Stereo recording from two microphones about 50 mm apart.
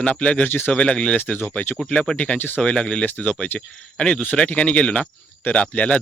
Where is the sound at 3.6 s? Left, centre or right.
Centre.